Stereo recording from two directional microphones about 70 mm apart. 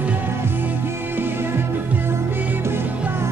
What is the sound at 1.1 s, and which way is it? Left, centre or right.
Music, right.